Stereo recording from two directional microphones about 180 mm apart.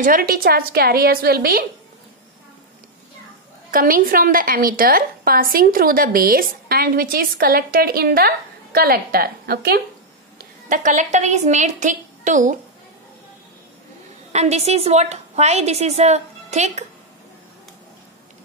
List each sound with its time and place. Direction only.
0.0 s a woman's voice: 50° right (ahead or behind)
3.7 s a woman's voice: 50° right (ahead or behind)
10.7 s a woman's voice: 45° right (ahead or behind)
14.3 s a woman's voice: 35° right (ahead or behind)